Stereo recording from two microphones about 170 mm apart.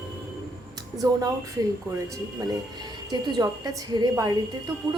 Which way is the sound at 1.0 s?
25° right (ahead or behind).